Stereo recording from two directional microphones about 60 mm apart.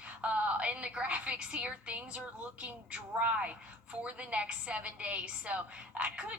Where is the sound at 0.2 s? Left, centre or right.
Right.